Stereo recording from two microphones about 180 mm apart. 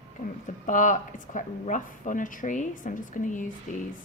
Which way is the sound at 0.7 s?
45° left (ahead or behind).